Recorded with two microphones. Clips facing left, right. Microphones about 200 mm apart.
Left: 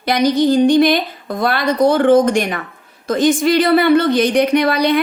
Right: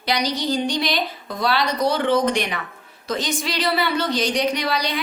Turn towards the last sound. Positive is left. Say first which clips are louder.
# left 9 dB
turn(degrees=55)  # may be behind; listen again after turning